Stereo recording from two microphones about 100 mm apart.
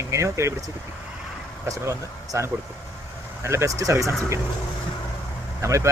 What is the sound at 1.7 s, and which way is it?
Speech, 30° right (ahead or behind).